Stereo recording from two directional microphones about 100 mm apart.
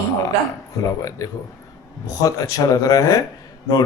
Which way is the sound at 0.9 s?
35° left (ahead or behind).